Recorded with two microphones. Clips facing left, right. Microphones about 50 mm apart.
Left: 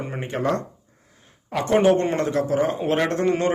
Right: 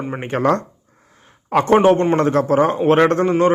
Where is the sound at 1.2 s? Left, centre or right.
Right.